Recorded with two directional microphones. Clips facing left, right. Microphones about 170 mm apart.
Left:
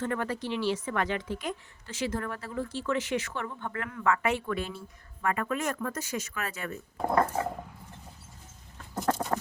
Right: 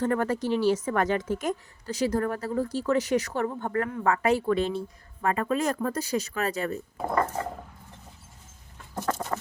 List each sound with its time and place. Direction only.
0.0 s a woman's voice: 40° right (ahead or behind)
7.0 s speech: centre (ahead or behind)
9.0 s a sound: 10° left (ahead or behind)